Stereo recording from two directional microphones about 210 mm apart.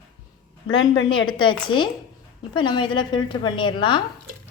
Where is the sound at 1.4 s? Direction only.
20° left (ahead or behind).